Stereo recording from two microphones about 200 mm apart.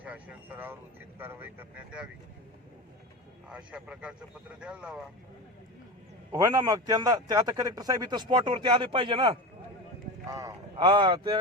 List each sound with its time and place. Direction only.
0.0 s speech: 5° right (ahead or behind)
3.5 s a man's voice: 5° right (ahead or behind)
6.3 s a man's voice: 20° right (ahead or behind)